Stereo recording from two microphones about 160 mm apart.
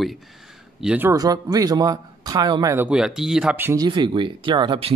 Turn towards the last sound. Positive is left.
turn(degrees=-35)  # may be behind; listen again after turning